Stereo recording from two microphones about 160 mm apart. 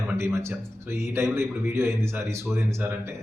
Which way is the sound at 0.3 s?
15° right (ahead or behind).